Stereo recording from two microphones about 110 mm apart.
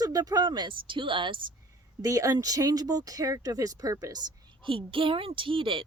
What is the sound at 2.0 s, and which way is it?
Speech, 30° right (ahead or behind).